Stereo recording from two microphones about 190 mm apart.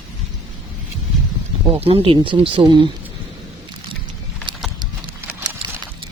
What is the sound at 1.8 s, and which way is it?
Speech, 30° right (ahead or behind).